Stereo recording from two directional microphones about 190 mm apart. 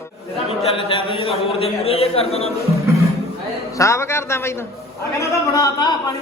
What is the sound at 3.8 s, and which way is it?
A man's voice, 15° left (ahead or behind).